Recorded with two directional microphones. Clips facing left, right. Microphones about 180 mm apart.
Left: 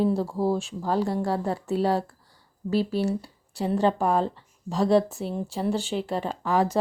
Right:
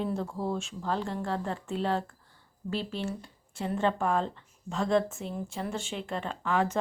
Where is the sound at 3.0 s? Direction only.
35° left (ahead or behind).